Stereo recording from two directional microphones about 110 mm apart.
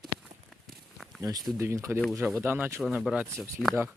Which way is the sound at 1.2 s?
35° right (ahead or behind).